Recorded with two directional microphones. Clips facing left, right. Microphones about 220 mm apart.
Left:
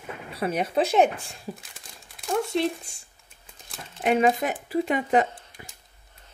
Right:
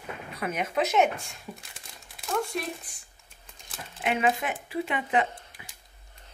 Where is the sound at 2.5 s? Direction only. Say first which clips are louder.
Left 8 dB; 25° left (ahead or behind).